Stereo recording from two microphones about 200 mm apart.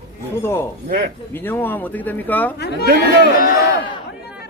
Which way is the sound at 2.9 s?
50° left (ahead or behind).